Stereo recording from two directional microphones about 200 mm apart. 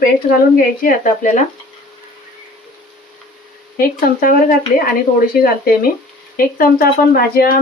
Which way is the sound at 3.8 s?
45° left (ahead or behind).